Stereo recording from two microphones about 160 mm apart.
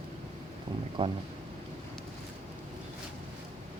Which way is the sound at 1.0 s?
35° right (ahead or behind).